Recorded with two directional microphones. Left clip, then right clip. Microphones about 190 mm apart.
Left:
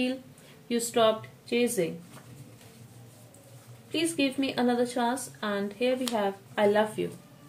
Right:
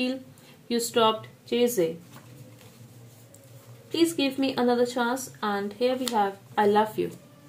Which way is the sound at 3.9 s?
30° right (ahead or behind).